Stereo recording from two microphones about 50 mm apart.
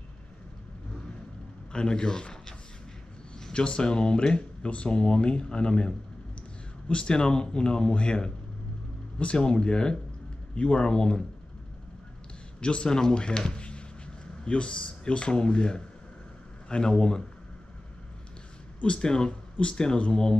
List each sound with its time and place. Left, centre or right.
1.7 s speech: centre
3.3 s speech: centre
12.5 s speech: centre
13.4 s a sound: centre
14.4 s speech: left
18.8 s speech: centre